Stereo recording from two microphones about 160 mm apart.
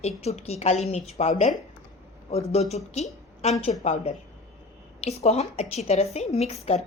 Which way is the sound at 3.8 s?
40° left (ahead or behind).